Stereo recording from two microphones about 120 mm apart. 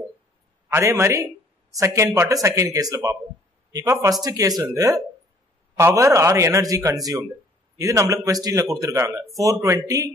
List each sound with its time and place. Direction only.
0.7 s speech: 25° right (ahead or behind)